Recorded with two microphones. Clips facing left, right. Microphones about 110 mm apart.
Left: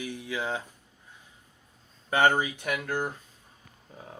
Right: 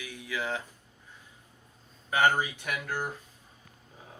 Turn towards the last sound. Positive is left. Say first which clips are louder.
# left 3 dB
turn(degrees=20)  # may be behind; listen again after turning